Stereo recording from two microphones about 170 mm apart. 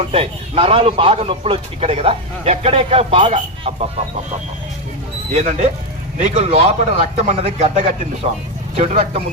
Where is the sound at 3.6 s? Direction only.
40° right (ahead or behind).